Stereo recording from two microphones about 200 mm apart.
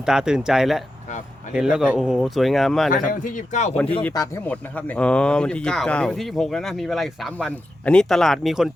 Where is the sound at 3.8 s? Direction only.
5° left (ahead or behind).